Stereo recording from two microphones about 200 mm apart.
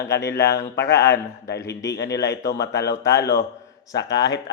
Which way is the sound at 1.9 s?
60° left (ahead or behind).